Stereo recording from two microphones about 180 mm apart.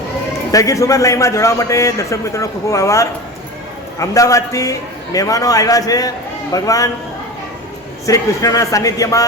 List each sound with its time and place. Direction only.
0.5 s a man's voice: 20° left (ahead or behind)
8.0 s a man's voice: 20° left (ahead or behind)